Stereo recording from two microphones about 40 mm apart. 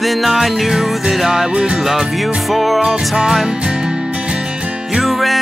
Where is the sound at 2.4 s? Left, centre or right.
Centre.